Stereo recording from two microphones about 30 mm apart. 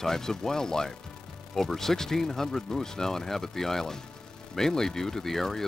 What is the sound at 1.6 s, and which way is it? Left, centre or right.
Speech, centre.